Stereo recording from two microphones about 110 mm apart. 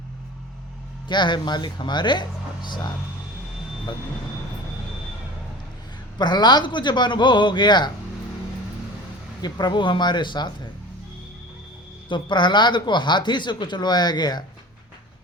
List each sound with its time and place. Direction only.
1.0 s speech: 45° left (ahead or behind)
6.1 s speech: 40° left (ahead or behind)
9.4 s speech: 40° left (ahead or behind)
12.0 s speech: 45° left (ahead or behind)